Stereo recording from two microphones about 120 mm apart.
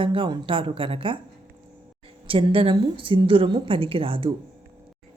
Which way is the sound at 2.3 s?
50° right (ahead or behind).